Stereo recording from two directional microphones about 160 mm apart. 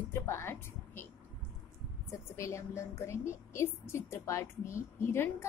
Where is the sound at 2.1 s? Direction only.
20° left (ahead or behind).